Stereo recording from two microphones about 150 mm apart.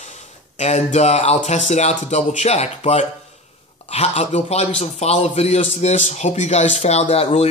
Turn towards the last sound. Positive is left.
turn(degrees=45)  # may be behind; listen again after turning